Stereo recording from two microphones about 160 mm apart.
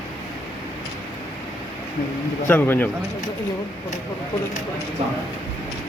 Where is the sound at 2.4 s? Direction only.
10° left (ahead or behind).